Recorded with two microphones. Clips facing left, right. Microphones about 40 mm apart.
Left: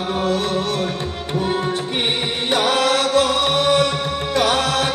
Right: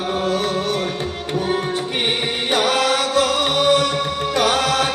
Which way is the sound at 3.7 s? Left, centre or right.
Left.